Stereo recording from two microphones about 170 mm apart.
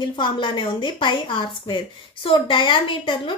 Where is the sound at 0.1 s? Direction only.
30° left (ahead or behind).